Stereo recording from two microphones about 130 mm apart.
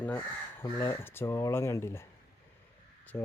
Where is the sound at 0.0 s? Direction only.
15° left (ahead or behind).